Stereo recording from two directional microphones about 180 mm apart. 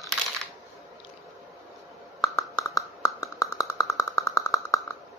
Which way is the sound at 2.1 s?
Centre (ahead or behind).